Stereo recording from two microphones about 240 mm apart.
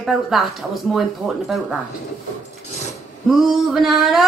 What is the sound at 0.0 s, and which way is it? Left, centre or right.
Speech, centre.